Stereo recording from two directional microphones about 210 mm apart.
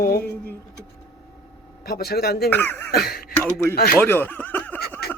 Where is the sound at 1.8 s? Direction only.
50° left (ahead or behind).